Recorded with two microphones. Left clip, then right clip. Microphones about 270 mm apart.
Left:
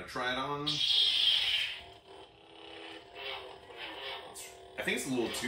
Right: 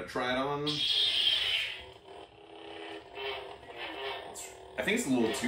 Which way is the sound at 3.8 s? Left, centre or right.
Centre.